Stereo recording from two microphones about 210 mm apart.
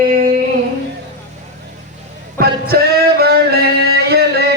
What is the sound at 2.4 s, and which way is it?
Music, 45° right (ahead or behind).